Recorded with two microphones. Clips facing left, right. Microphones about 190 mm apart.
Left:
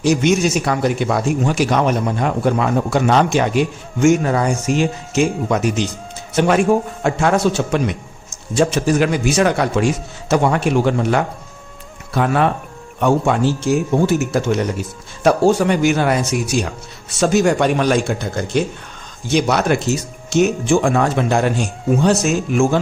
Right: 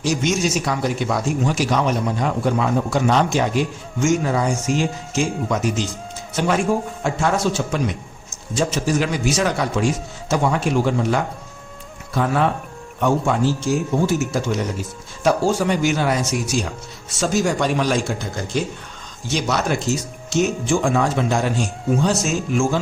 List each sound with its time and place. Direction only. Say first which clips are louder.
0.0 s speech: left 5 dB; 60° left (ahead or behind)
19.3 s speech: left 5 dB; 60° left (ahead or behind)